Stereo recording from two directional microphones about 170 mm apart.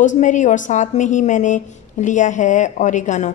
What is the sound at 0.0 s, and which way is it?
A woman's voice, 45° left (ahead or behind).